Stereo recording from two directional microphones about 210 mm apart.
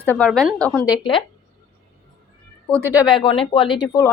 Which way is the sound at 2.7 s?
10° right (ahead or behind).